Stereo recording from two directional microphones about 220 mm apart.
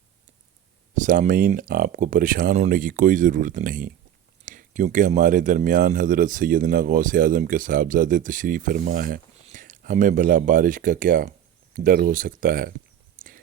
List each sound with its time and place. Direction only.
0.9 s speech: 35° right (ahead or behind)